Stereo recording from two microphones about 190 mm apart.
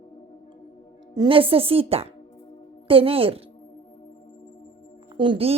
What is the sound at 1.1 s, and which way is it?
A woman's voice, 25° right (ahead or behind).